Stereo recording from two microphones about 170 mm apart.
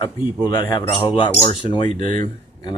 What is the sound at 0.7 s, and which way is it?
Speech, 30° left (ahead or behind).